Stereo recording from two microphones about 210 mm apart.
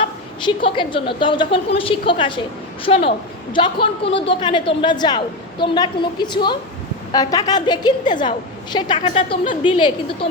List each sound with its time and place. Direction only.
0.4 s a woman's voice: 25° left (ahead or behind)